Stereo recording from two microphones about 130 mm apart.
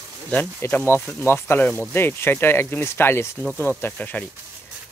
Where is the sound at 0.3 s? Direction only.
15° left (ahead or behind).